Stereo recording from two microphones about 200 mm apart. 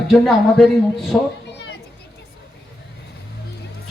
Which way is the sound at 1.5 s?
60° left (ahead or behind).